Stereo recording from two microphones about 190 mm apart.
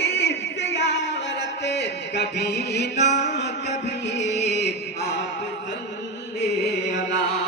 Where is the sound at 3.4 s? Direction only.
65° left (ahead or behind).